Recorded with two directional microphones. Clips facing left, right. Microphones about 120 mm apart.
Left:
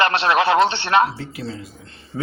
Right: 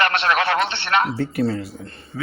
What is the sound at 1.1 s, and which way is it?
Speech, 55° right (ahead or behind).